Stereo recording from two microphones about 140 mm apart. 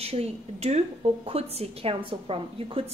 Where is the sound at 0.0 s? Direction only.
45° right (ahead or behind).